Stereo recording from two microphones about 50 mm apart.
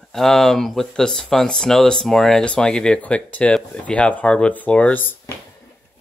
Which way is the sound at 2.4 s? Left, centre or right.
Centre.